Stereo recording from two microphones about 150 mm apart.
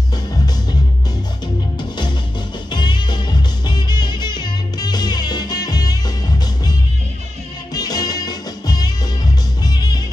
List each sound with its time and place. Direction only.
1.8 s music: 30° left (ahead or behind)
7.7 s music: 25° left (ahead or behind)